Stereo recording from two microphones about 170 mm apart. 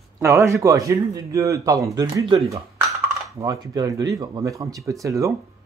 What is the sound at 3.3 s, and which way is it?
Speech, 20° right (ahead or behind).